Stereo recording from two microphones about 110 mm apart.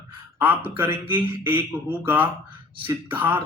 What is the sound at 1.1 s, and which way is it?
A man's voice, 20° right (ahead or behind).